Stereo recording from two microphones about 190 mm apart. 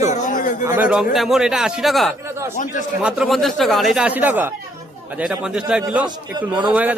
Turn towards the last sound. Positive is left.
turn(degrees=-10)  # may be behind; listen again after turning